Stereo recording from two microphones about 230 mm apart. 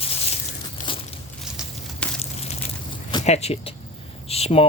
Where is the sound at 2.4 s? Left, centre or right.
Left.